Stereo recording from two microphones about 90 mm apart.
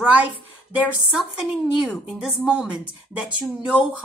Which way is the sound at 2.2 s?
10° right (ahead or behind).